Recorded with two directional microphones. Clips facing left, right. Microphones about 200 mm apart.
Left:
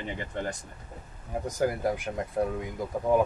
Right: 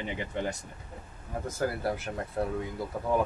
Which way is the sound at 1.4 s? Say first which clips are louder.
Left 3 dB; 15° left (ahead or behind).